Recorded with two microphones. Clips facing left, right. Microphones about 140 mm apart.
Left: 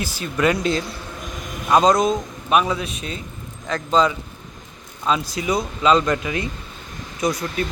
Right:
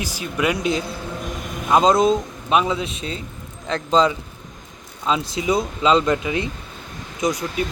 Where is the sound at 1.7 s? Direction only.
25° right (ahead or behind).